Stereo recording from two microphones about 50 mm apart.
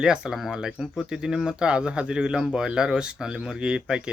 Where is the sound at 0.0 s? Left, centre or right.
Centre.